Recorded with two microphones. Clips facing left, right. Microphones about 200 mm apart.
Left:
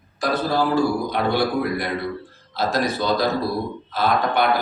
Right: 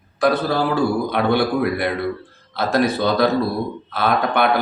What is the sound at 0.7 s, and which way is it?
Speech, 60° right (ahead or behind).